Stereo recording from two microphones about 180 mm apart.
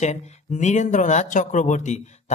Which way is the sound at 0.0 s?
40° left (ahead or behind).